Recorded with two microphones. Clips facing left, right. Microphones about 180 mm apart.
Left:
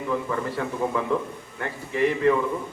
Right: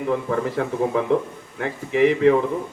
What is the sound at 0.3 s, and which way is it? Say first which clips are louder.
Speech: right 5 dB; 65° right (ahead or behind).